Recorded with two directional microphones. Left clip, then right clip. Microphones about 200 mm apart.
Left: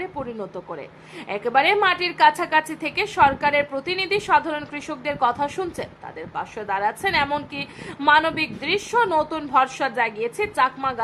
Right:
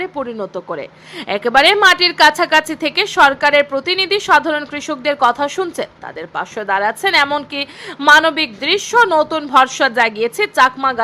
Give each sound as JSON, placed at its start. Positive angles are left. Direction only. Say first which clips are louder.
{"t": 0.0, "sound": "a woman's voice", "louder": "right 8 dB", "side_deg": -20}